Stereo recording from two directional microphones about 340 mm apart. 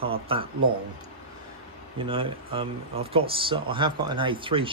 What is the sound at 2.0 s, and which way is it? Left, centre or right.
Speech, centre.